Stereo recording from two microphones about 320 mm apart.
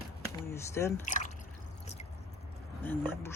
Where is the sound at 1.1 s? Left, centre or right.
Left.